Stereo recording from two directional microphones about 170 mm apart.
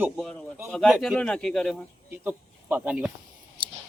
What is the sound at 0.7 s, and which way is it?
Speech, 5° left (ahead or behind).